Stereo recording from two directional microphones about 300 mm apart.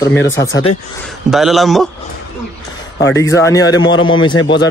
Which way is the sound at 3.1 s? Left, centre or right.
Centre.